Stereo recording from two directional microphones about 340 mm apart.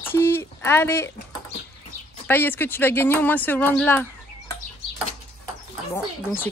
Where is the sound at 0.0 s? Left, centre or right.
Centre.